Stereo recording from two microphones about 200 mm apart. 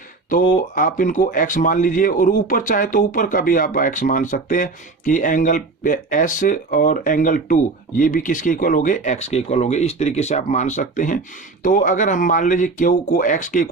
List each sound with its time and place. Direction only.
0.3 s speech: 40° left (ahead or behind)